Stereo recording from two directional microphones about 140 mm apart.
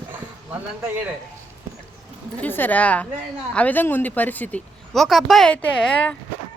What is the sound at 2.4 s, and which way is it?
Speech, 15° left (ahead or behind).